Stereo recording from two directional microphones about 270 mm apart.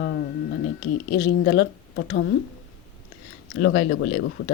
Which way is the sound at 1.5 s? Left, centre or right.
Left.